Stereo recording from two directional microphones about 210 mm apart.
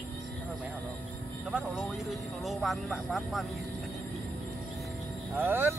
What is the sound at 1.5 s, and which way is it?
Speech, centre (ahead or behind).